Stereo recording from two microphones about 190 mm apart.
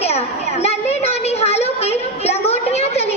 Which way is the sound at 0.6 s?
35° left (ahead or behind).